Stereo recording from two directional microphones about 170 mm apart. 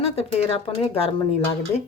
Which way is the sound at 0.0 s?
35° left (ahead or behind).